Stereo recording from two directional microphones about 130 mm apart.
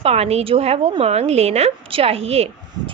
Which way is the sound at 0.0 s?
50° right (ahead or behind).